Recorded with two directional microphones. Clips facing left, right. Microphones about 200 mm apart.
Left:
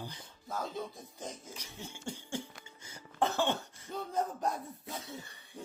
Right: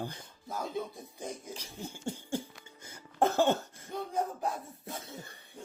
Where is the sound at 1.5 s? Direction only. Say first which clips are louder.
Right 4 dB; 30° right (ahead or behind).